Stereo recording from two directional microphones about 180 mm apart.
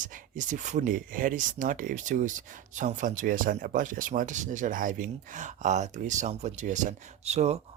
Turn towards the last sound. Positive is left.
turn(degrees=-35)  # may be behind; listen again after turning